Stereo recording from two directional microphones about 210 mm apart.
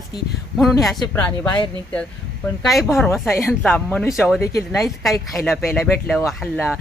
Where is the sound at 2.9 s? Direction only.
10° left (ahead or behind).